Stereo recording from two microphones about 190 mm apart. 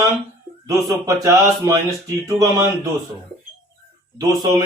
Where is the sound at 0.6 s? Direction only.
15° right (ahead or behind).